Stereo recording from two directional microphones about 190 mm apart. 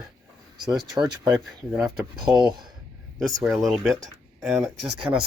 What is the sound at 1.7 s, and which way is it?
Speech, centre (ahead or behind).